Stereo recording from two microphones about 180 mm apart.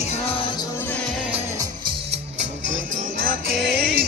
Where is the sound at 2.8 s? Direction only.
45° right (ahead or behind).